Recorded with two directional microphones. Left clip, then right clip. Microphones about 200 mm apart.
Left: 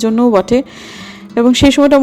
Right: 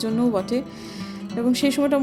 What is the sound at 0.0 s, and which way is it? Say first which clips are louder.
A woman's voice: left 12 dB; 35° left (ahead or behind).